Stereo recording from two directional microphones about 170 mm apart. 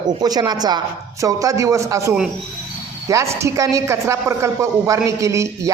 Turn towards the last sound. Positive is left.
turn(degrees=-15)  # may be behind; listen again after turning